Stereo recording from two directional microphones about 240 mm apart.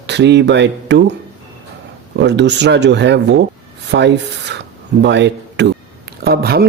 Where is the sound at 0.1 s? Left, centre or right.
Right.